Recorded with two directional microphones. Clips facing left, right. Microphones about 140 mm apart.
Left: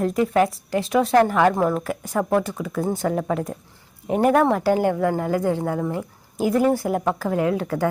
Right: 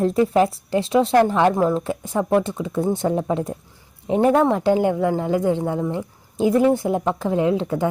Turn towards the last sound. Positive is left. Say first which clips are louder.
# right 2 dB
turn(degrees=-20)  # may be behind; listen again after turning